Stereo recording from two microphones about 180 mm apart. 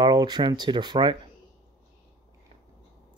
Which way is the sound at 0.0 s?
25° right (ahead or behind).